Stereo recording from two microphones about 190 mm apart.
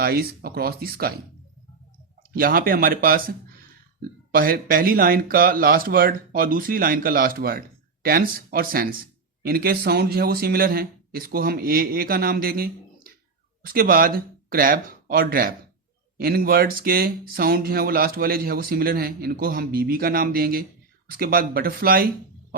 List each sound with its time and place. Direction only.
0.0 s speech: 55° right (ahead or behind)
2.3 s speech: 50° right (ahead or behind)